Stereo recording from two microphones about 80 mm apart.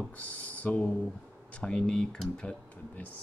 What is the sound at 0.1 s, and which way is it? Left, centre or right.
Speech, centre.